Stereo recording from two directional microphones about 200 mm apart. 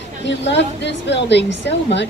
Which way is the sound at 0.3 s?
60° left (ahead or behind).